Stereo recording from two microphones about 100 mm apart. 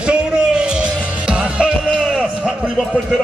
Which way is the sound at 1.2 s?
10° right (ahead or behind).